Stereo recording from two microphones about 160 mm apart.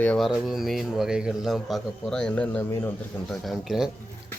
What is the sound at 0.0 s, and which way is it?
A man's voice, 10° left (ahead or behind).